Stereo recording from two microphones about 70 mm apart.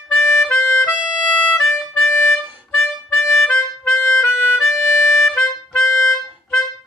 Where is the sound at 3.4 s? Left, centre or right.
Left.